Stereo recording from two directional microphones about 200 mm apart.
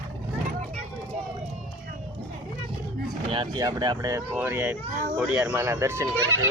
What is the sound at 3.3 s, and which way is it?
Speech, 25° right (ahead or behind).